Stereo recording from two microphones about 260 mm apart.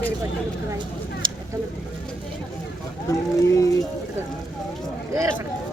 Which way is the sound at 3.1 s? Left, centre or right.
Centre.